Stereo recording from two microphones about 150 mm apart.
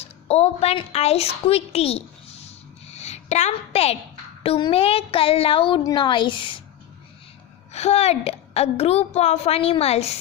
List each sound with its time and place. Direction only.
0.0 s a woman's voice: 45° left (ahead or behind)
7.7 s a woman's voice: 45° left (ahead or behind)